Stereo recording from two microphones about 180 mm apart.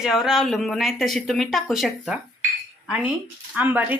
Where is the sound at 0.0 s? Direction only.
5° right (ahead or behind).